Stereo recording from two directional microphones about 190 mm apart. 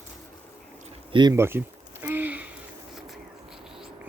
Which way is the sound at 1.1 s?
20° right (ahead or behind).